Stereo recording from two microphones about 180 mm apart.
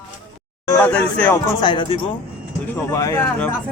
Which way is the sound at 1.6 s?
25° left (ahead or behind).